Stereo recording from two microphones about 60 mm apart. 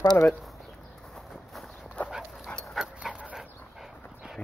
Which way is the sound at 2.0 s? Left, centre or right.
Left.